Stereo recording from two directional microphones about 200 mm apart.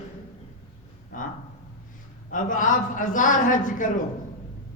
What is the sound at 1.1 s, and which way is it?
Speech, 40° left (ahead or behind).